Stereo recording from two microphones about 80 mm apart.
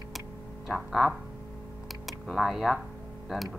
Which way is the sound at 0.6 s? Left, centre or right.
Centre.